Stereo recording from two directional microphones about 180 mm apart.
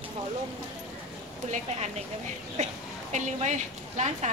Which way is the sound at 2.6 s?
40° right (ahead or behind).